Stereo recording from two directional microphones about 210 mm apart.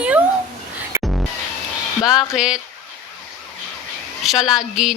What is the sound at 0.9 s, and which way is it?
Music, 15° right (ahead or behind).